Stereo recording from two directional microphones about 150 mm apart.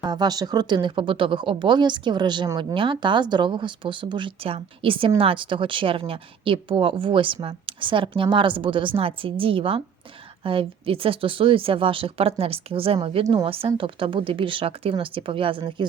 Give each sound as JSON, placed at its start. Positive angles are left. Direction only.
{"t": 0.1, "sound": "speech", "side_deg": -30}